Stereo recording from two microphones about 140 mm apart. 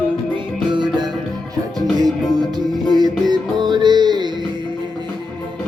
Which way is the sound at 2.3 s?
30° right (ahead or behind).